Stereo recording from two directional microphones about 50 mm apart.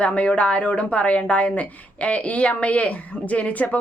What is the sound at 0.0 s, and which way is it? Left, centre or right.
A woman's voice, left.